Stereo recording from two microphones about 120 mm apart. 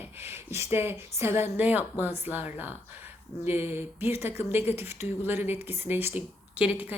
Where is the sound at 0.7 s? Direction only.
20° right (ahead or behind).